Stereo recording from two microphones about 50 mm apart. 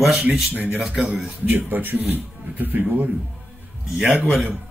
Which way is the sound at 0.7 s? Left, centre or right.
Centre.